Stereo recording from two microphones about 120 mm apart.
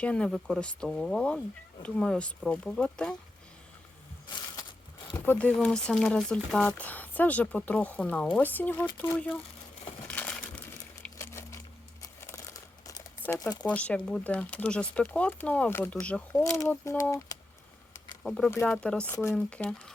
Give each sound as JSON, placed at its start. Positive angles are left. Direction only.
{"t": 0.0, "sound": "speech", "side_deg": 10}
{"t": 5.2, "sound": "speech", "side_deg": 15}
{"t": 10.1, "sound": "crushing", "side_deg": 10}
{"t": 12.2, "sound": "crumpling", "side_deg": 25}
{"t": 13.7, "sound": "speech", "side_deg": 10}
{"t": 16.4, "sound": "speech", "side_deg": 25}
{"t": 18.2, "sound": "speech", "side_deg": 5}
{"t": 19.1, "sound": "speech", "side_deg": 20}
{"t": 19.4, "sound": "speech", "side_deg": 10}